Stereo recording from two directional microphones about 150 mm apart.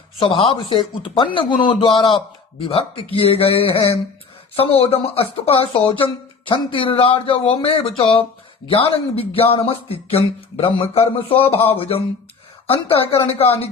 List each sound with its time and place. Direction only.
0.2 s speech: 35° left (ahead or behind)